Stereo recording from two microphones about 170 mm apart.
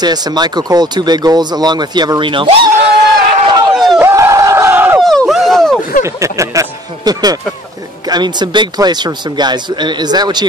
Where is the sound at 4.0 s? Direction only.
15° right (ahead or behind).